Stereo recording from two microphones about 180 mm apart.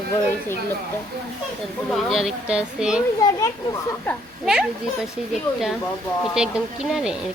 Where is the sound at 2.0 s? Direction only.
Centre (ahead or behind).